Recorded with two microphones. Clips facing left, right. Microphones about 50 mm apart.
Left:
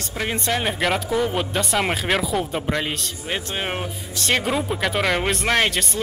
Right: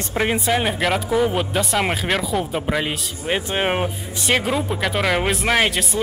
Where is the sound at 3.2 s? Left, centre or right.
Centre.